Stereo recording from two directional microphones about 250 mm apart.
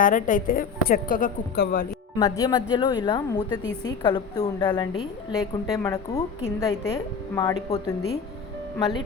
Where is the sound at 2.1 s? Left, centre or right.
Centre.